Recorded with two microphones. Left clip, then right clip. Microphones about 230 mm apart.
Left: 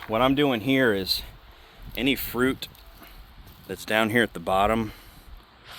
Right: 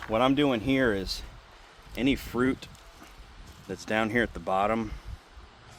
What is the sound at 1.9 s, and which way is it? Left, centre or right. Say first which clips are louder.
Speech: left 3 dB; left.